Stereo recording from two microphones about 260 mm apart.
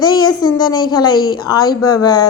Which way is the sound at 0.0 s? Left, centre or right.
Centre.